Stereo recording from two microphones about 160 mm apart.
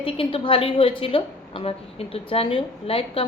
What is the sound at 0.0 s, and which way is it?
A woman's voice, 35° left (ahead or behind).